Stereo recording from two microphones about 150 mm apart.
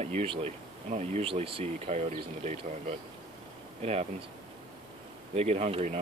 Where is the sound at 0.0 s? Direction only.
45° right (ahead or behind).